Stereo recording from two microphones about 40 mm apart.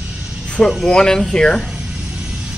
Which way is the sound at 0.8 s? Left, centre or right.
Centre.